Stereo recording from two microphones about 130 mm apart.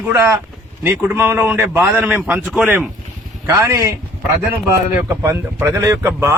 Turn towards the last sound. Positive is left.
turn(degrees=-20)  # may be behind; listen again after turning